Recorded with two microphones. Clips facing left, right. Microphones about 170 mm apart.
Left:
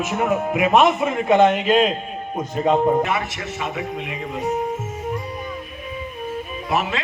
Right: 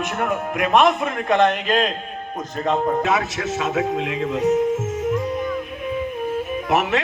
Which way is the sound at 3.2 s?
85° right.